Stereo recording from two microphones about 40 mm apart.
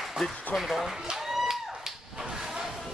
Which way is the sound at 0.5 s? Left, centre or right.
Centre.